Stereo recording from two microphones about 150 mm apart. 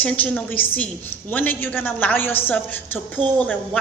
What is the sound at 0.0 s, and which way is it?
A woman's voice, 10° left (ahead or behind).